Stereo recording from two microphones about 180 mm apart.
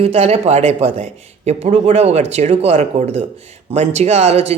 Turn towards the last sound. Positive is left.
turn(degrees=-35)  # may be behind; listen again after turning